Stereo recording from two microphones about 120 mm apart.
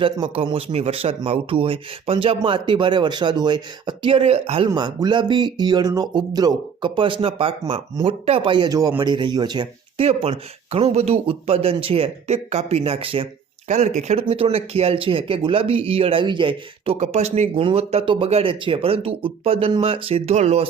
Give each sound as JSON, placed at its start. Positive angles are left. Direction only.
{"t": 0.0, "sound": "speech", "side_deg": -45}
{"t": 4.7, "sound": "speech", "side_deg": -35}
{"t": 10.0, "sound": "speech", "side_deg": -55}
{"t": 13.7, "sound": "speech", "side_deg": -75}
{"t": 14.3, "sound": "speech", "side_deg": -55}
{"t": 17.0, "sound": "speech", "side_deg": -65}
{"t": 17.6, "sound": "speech", "side_deg": -50}